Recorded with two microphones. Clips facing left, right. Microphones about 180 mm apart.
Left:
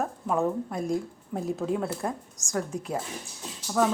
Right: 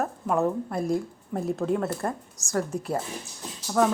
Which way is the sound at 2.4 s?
15° left (ahead or behind).